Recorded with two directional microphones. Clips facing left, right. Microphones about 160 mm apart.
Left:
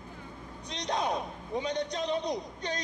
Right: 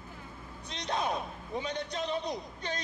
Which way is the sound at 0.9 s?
15° left (ahead or behind).